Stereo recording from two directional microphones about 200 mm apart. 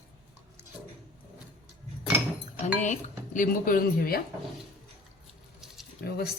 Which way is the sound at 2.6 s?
35° left (ahead or behind).